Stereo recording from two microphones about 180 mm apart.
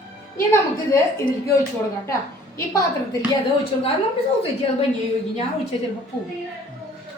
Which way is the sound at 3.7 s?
30° left (ahead or behind).